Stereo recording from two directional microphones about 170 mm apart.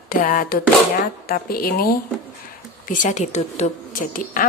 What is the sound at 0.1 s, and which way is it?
A woman's voice, 50° left (ahead or behind).